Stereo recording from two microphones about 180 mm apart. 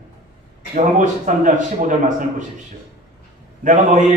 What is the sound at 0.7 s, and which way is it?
Speech, 45° right (ahead or behind).